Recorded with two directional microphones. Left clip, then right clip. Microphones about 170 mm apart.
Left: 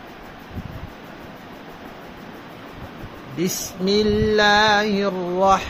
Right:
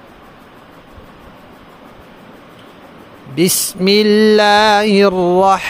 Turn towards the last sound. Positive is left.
turn(degrees=-70)  # may be behind; listen again after turning